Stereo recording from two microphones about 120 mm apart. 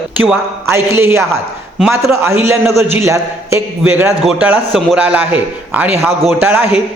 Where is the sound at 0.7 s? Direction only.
20° right (ahead or behind).